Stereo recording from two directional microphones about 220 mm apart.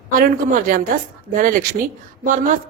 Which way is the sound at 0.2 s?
40° right (ahead or behind).